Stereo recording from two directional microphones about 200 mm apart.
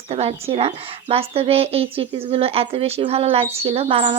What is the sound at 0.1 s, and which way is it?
Speech, 30° right (ahead or behind).